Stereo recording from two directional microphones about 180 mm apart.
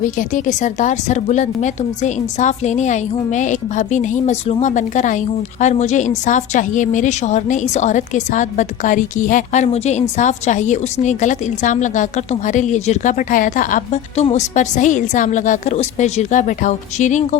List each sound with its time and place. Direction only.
0.0 s a woman's voice: 45° left (ahead or behind)